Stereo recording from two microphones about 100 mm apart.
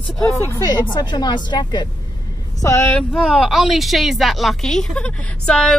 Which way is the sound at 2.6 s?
30° left (ahead or behind).